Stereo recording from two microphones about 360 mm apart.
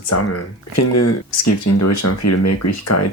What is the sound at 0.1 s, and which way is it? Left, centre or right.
Speech, left.